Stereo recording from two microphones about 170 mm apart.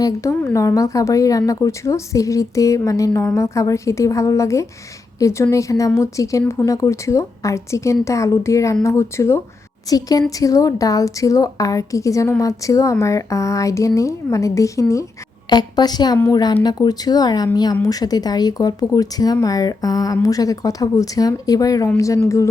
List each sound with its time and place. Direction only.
0.0 s a woman's voice: 20° left (ahead or behind)